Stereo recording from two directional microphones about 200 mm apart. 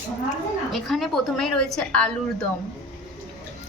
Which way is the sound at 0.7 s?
Centre (ahead or behind).